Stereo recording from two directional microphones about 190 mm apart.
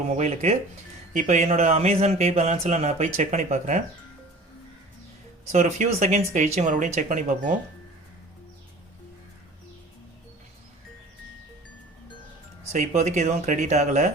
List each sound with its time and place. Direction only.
0.2 s speech: 35° right (ahead or behind)
5.5 s speech: 35° right (ahead or behind)
12.7 s speech: 35° right (ahead or behind)